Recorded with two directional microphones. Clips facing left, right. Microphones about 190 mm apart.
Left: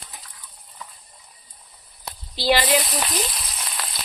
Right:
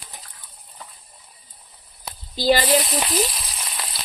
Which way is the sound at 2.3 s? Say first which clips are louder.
Right 2 dB; 45° right (ahead or behind).